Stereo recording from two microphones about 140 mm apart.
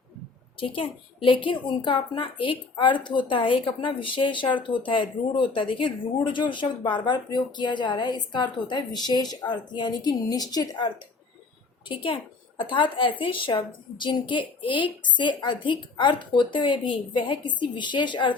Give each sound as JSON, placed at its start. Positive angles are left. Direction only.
{"t": 0.6, "sound": "a woman's voice", "side_deg": 40}
{"t": 11.9, "sound": "a woman's voice", "side_deg": 40}